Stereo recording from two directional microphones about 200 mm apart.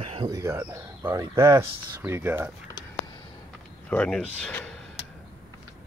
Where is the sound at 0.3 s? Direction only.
15° right (ahead or behind).